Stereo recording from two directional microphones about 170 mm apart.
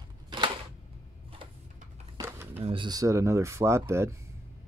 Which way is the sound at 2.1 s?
15° right (ahead or behind).